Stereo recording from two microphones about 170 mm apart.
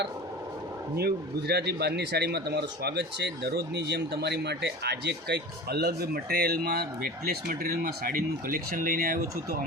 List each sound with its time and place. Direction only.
0.9 s speech: 70° right (ahead or behind)